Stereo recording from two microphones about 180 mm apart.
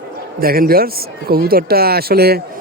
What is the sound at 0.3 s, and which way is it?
Speech, 55° right (ahead or behind).